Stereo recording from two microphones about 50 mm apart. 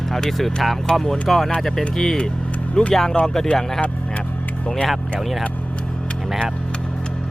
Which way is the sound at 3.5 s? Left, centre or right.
Left.